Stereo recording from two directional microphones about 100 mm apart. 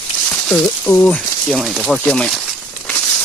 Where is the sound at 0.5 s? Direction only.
15° left (ahead or behind).